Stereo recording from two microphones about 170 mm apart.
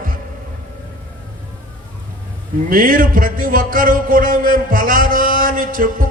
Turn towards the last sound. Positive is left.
turn(degrees=-55)  # may be behind; listen again after turning